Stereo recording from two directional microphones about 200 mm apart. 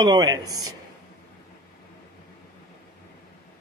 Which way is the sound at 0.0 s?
20° right (ahead or behind).